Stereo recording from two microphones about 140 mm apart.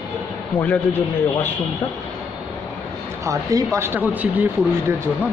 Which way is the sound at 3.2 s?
20° right (ahead or behind).